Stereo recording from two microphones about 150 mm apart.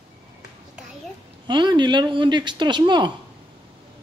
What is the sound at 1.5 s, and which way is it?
Speech, 30° right (ahead or behind).